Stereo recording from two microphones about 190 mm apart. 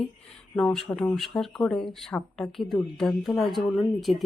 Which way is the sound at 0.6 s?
5° left (ahead or behind).